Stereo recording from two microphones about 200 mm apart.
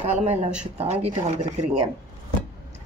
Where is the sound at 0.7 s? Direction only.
30° right (ahead or behind).